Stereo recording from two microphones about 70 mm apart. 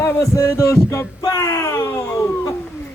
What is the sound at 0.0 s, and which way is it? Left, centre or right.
Speech, left.